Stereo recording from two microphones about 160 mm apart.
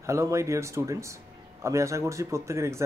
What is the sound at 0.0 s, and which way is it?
A man's voice, 20° right (ahead or behind).